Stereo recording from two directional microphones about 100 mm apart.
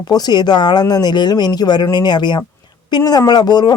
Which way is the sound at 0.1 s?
45° left (ahead or behind).